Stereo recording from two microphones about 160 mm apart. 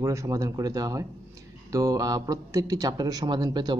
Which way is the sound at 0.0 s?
20° right (ahead or behind).